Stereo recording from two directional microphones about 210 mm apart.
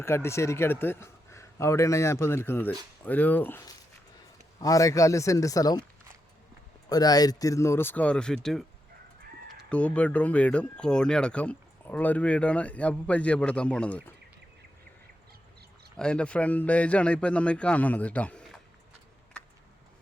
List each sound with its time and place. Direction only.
0.0 s speech: 10° left (ahead or behind)
6.8 s speech: 20° left (ahead or behind); by 8.6 s centre (ahead or behind)
9.6 s speech: 5° left (ahead or behind)
16.0 s speech: 5° left (ahead or behind)
19.3 s a sound: 5° left (ahead or behind)